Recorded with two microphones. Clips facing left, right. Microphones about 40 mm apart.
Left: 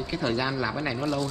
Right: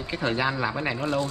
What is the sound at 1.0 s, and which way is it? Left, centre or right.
Speech, right.